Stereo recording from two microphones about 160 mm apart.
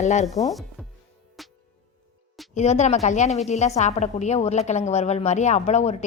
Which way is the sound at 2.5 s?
45° left (ahead or behind).